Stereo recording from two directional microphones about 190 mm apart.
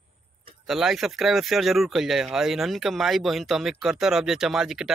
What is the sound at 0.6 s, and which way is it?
Speech, centre (ahead or behind).